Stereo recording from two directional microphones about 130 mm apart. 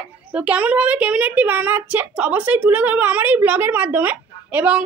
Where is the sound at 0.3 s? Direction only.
10° right (ahead or behind).